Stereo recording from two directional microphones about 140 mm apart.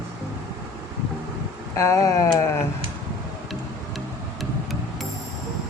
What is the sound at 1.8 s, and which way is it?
Speech, 25° left (ahead or behind).